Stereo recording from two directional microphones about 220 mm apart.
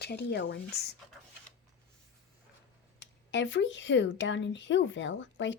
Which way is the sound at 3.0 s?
55° left (ahead or behind).